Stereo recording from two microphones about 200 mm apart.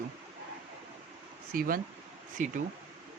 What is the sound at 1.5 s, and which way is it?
Speech, 45° right (ahead or behind).